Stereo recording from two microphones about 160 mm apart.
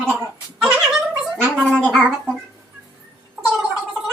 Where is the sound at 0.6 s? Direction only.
5° right (ahead or behind).